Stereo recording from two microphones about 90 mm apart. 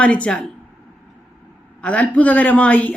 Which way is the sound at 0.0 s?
15° left (ahead or behind).